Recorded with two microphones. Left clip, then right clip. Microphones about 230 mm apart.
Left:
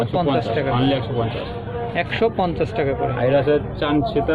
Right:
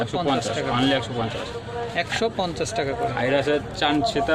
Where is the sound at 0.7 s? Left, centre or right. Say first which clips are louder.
Right 2 dB; right.